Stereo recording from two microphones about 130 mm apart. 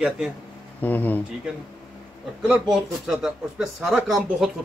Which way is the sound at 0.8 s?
15° left (ahead or behind).